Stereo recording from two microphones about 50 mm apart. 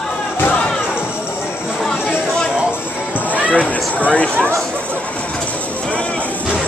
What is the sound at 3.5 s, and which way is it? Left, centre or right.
Speech, left.